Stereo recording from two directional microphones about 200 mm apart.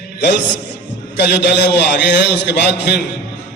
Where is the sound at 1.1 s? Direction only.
60° left (ahead or behind).